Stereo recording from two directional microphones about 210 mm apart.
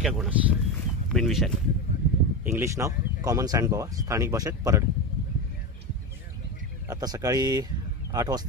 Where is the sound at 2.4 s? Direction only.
10° right (ahead or behind).